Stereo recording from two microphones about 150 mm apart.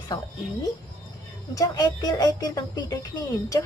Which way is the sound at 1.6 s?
25° left (ahead or behind).